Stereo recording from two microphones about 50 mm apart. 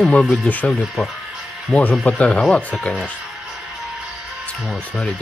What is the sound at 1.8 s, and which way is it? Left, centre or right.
Speech, left.